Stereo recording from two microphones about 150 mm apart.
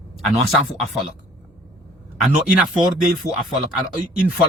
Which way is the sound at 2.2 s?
5° right (ahead or behind).